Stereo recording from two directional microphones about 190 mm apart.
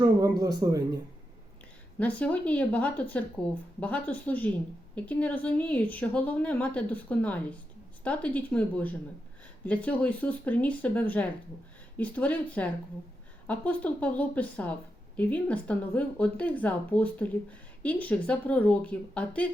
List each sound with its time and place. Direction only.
0.0 s speech: 20° right (ahead or behind)
2.0 s a woman's voice: 5° left (ahead or behind)